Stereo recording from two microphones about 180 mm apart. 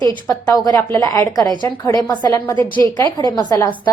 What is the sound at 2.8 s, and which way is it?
Speech, 25° right (ahead or behind).